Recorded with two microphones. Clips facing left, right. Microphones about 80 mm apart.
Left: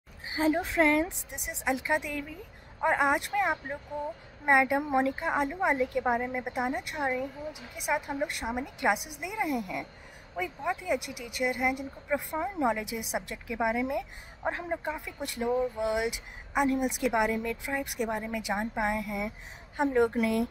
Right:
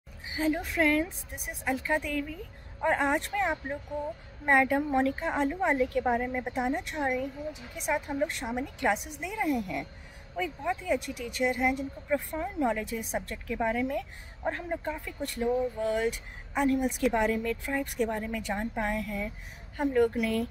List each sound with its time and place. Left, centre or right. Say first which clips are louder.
0.3 s a woman's voice: left 2 dB; left
5.2 s a woman's voice: even; centre
12.4 s a woman's voice: left 1 dB; centre